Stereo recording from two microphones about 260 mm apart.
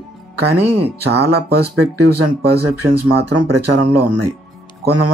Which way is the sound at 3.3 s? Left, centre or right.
Right.